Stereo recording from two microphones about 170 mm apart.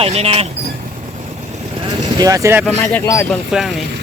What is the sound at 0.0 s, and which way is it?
Speech, 35° right (ahead or behind).